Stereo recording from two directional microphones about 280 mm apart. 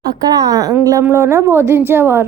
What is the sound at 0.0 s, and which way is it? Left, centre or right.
A woman's voice, centre.